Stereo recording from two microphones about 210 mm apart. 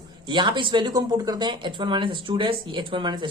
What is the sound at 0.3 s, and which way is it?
Speech, 20° right (ahead or behind).